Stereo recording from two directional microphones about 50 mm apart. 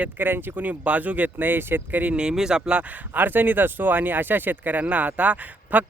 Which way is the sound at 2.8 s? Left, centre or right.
Right.